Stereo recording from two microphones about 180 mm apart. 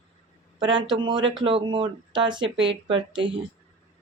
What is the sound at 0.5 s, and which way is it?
A woman's voice, 25° right (ahead or behind).